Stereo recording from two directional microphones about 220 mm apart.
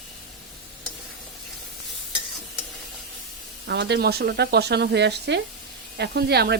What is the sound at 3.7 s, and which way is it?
Speech, 50° right (ahead or behind).